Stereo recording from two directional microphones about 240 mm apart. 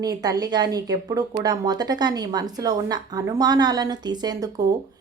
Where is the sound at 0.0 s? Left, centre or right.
Centre.